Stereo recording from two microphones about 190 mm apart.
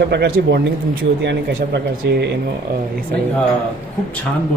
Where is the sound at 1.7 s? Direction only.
65° right (ahead or behind).